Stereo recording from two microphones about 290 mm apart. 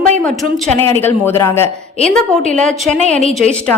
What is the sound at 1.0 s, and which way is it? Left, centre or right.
A woman's voice, centre.